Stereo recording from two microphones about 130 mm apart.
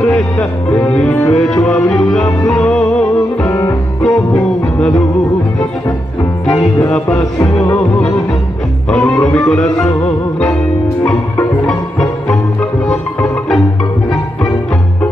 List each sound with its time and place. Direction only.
0.0 s music: 10° left (ahead or behind)
6.4 s music: 5° left (ahead or behind)
8.9 s music: 5° left (ahead or behind)
11.1 s music: 5° left (ahead or behind)
12.8 s music: 5° left (ahead or behind)